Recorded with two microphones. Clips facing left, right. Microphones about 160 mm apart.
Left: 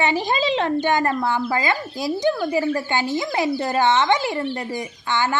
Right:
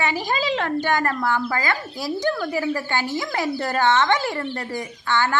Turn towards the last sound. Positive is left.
turn(degrees=15)  # may be behind; listen again after turning